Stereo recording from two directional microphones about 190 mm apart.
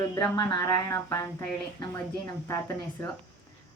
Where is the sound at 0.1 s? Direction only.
20° left (ahead or behind).